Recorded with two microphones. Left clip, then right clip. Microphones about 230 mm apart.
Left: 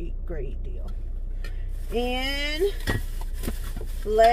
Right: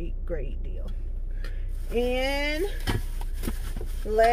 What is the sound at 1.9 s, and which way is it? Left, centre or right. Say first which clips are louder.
Speech: right 1 dB; right.